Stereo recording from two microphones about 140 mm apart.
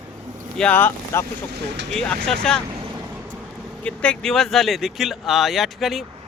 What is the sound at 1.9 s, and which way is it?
Speech, 5° left (ahead or behind).